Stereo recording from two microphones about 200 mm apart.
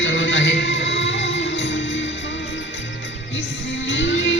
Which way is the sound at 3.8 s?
70° left (ahead or behind).